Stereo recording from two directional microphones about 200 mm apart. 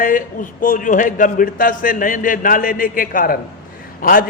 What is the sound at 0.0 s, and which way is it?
A man's voice, 45° left (ahead or behind).